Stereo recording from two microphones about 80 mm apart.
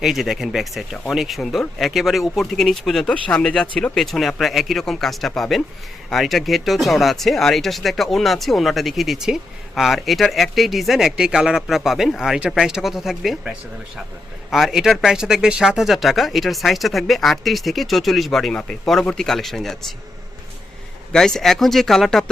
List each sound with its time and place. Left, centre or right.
0.0 s speech: centre
21.1 s speech: centre